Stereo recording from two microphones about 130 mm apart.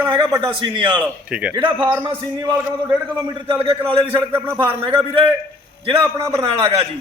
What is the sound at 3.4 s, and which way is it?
Speech, 45° right (ahead or behind).